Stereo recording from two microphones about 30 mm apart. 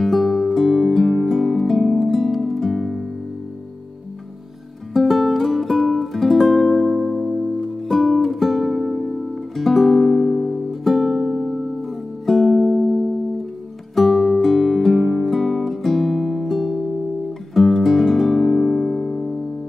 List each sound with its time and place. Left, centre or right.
0.0 s music: centre
4.9 s music: centre